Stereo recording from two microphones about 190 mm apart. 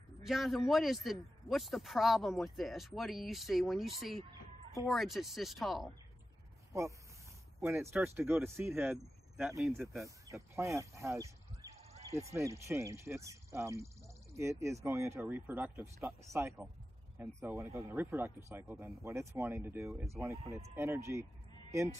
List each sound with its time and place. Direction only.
0.2 s speech: centre (ahead or behind)
6.7 s speech: 15° right (ahead or behind)
10.0 s speech: 15° right (ahead or behind)
11.7 s a sound: 35° right (ahead or behind)
12.1 s speech: 15° right (ahead or behind)